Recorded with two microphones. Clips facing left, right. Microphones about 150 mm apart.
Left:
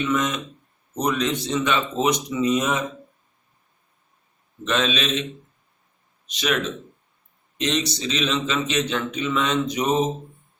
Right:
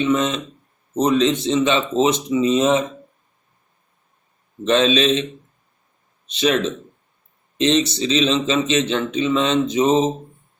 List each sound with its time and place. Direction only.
0.0 s speech: 25° right (ahead or behind)
4.6 s a man's voice: 30° right (ahead or behind)
6.2 s speech: 25° right (ahead or behind)
7.6 s speech: 25° right (ahead or behind)